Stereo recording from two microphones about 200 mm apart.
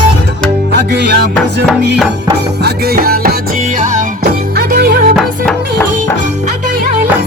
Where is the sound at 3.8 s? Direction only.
35° right (ahead or behind).